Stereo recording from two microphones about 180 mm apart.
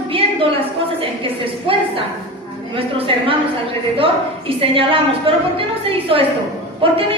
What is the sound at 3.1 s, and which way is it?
A woman's voice, 30° right (ahead or behind).